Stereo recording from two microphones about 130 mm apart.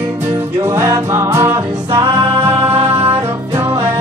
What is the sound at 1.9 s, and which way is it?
Music, 35° right (ahead or behind).